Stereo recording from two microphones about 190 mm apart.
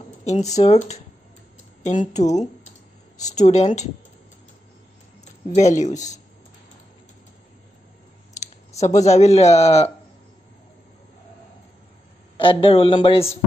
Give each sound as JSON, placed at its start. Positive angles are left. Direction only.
{"t": 0.2, "sound": "speech", "side_deg": 35}
{"t": 5.2, "sound": "speech", "side_deg": 35}
{"t": 8.4, "sound": "speech", "side_deg": 35}
{"t": 12.4, "sound": "speech", "side_deg": 30}